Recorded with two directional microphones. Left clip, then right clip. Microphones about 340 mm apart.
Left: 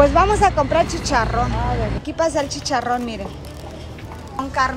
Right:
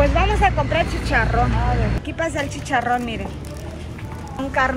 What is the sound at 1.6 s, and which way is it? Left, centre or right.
Vehicle, left.